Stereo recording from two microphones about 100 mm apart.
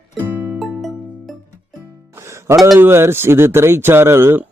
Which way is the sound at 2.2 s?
30° right (ahead or behind).